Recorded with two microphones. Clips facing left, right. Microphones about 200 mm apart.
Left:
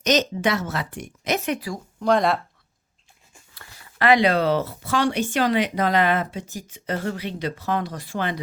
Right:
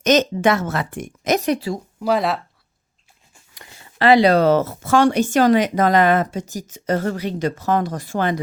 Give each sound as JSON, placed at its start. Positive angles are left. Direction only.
{"t": 0.0, "sound": "speech", "side_deg": -50}
{"t": 1.5, "sound": "speech", "side_deg": -25}
{"t": 2.0, "sound": "speech", "side_deg": -5}
{"t": 3.5, "sound": "speech", "side_deg": -20}